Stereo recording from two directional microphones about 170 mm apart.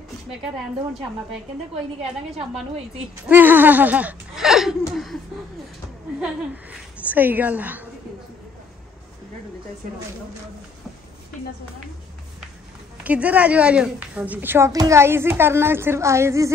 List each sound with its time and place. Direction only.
3.3 s a woman's voice: 10° right (ahead or behind)
7.1 s a woman's voice: 10° right (ahead or behind)
13.0 s a woman's voice: 10° right (ahead or behind)